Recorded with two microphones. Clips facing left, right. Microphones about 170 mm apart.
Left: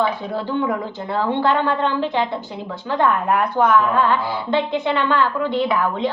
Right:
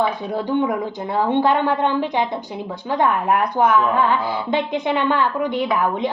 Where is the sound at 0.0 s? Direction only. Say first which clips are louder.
Even; 15° right (ahead or behind).